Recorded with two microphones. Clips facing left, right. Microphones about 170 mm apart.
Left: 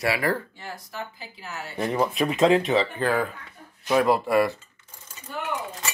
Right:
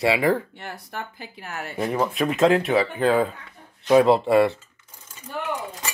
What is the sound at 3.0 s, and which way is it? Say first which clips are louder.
Speech: right 4 dB; 20° right (ahead or behind).